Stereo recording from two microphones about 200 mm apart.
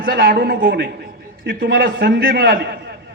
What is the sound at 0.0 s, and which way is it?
A man's voice, 50° right (ahead or behind).